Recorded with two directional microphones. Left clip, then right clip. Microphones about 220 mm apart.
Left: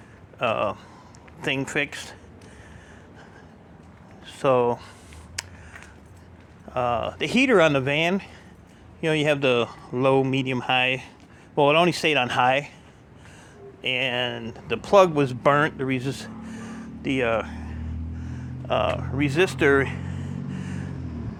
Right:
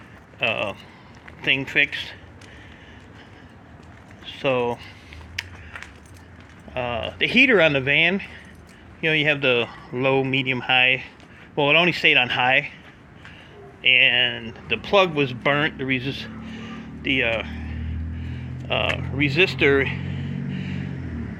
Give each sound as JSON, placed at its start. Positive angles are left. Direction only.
{"t": 0.3, "sound": "speech", "side_deg": 15}
{"t": 4.4, "sound": "speech", "side_deg": 25}
{"t": 5.4, "sound": "a sound", "side_deg": 30}
{"t": 6.7, "sound": "speech", "side_deg": 20}
{"t": 13.8, "sound": "speech", "side_deg": 30}